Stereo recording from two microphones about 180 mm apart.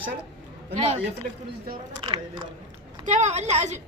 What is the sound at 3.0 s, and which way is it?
Speech, 40° right (ahead or behind).